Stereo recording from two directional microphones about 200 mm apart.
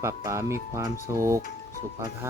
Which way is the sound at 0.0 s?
15° right (ahead or behind).